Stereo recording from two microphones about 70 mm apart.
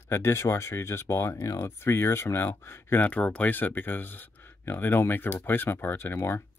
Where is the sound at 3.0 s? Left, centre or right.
Centre.